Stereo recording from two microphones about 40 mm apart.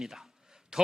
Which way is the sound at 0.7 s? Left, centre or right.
Centre.